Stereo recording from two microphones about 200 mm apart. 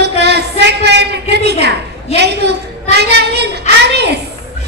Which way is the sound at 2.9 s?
55° right (ahead or behind).